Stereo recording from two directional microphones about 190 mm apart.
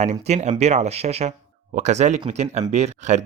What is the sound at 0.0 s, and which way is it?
Speech, 35° right (ahead or behind).